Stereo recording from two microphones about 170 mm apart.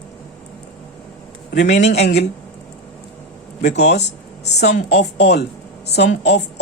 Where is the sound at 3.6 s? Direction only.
85° left.